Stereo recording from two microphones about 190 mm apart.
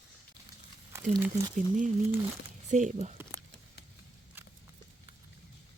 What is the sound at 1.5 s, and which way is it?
Speech, 40° right (ahead or behind).